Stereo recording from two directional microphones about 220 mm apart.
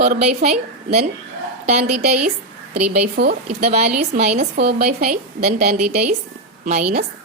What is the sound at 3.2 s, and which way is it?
Speech, 50° right (ahead or behind).